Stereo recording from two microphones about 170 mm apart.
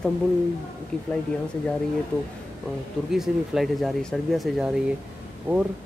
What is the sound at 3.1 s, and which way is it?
Speech, centre (ahead or behind).